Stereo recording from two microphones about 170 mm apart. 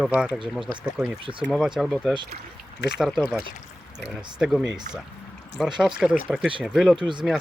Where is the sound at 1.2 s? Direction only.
30° right (ahead or behind).